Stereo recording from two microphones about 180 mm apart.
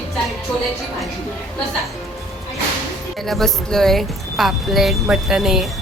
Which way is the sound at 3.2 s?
Centre (ahead or behind).